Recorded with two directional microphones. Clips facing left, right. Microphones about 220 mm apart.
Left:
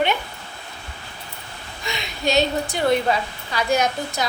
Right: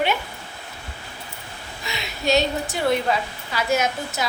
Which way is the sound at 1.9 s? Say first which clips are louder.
Right 1 dB; 5° right (ahead or behind).